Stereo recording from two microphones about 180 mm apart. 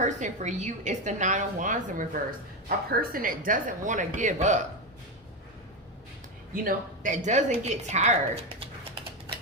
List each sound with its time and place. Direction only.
0.0 s a woman's voice: 40° right (ahead or behind)
6.5 s a woman's voice: 50° right (ahead or behind)